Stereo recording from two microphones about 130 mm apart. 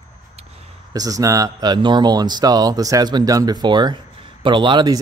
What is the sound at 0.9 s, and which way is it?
Speech, 30° right (ahead or behind).